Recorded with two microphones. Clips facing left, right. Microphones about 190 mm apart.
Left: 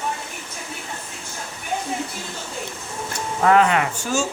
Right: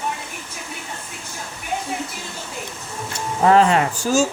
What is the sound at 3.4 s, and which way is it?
Speech, 30° right (ahead or behind).